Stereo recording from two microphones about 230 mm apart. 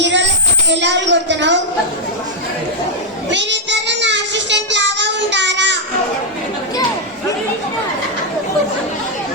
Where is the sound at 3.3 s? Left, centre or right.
Right.